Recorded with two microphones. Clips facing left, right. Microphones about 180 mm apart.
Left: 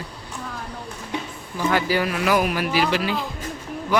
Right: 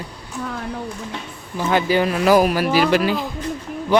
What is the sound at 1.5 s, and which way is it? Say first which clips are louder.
Speech: right 3 dB; 20° right (ahead or behind).